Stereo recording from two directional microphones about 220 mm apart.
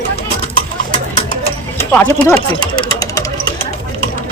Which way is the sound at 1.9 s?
10° left (ahead or behind).